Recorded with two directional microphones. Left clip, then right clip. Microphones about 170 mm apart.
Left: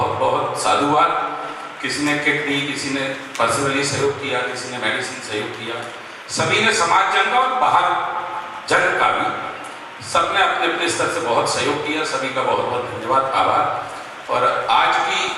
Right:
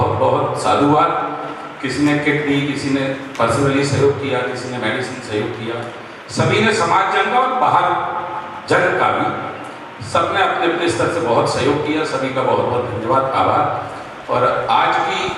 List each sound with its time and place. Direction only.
0.2 s a sound: 10° right (ahead or behind)
0.5 s a man's voice: 10° right (ahead or behind)
7.9 s a man's voice: 20° right (ahead or behind)
8.7 s a man's voice: 10° right (ahead or behind)
12.8 s a man's voice: 40° right (ahead or behind)
13.3 s a man's voice: 10° right (ahead or behind)